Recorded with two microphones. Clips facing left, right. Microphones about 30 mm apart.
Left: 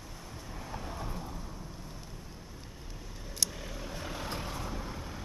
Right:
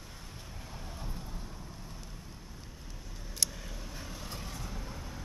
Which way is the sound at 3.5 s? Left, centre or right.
Centre.